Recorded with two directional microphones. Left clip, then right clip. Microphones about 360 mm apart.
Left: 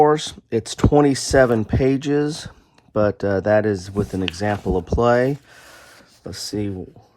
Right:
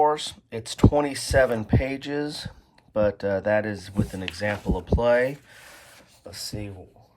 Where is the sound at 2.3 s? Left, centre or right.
Centre.